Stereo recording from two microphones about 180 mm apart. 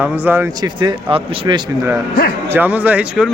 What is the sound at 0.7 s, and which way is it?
Speech, 25° right (ahead or behind).